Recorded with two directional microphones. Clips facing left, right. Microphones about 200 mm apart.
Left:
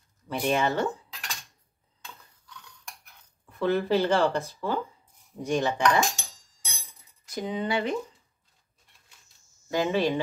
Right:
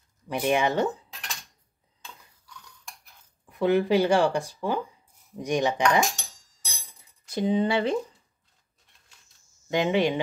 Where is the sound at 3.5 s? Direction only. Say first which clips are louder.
Right 3 dB; 15° right (ahead or behind).